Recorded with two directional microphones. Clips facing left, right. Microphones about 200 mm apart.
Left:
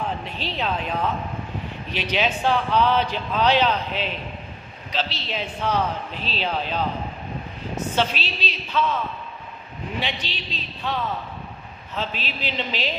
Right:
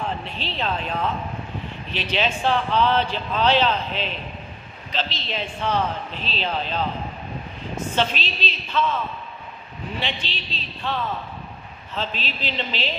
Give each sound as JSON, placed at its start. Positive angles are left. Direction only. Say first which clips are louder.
{"t": 0.4, "sound": "a man's voice", "louder": "left 1 dB", "side_deg": 10}
{"t": 2.1, "sound": "a man's voice", "louder": "even", "side_deg": 10}
{"t": 7.9, "sound": "a man's voice", "louder": "even", "side_deg": 10}
{"t": 9.9, "sound": "a man's voice", "louder": "left 1 dB", "side_deg": 10}